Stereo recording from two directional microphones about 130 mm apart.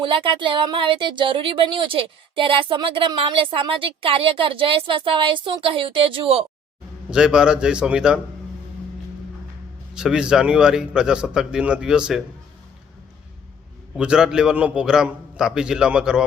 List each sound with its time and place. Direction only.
0.0 s speech: 40° right (ahead or behind)
7.1 s a man's voice: 5° right (ahead or behind)
9.9 s a man's voice: 5° right (ahead or behind)
13.9 s a man's voice: 5° right (ahead or behind)